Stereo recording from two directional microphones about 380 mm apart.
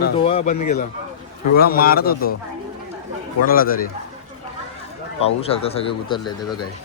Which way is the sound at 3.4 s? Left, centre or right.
Left.